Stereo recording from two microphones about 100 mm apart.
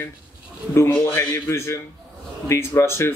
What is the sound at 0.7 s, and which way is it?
Speech, 30° left (ahead or behind).